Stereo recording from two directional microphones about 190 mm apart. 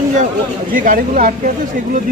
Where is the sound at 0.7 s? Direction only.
45° right (ahead or behind).